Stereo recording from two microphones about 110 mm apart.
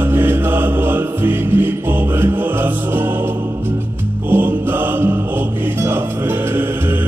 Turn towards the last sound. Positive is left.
turn(degrees=-20)  # may be behind; listen again after turning